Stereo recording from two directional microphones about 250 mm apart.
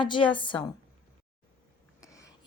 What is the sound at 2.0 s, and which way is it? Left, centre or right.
Whispering, centre.